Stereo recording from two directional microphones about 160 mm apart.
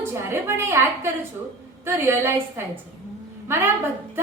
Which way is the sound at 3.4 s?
15° right (ahead or behind).